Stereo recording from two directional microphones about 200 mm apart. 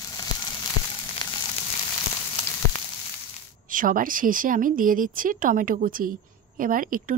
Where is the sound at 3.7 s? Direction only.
45° right (ahead or behind).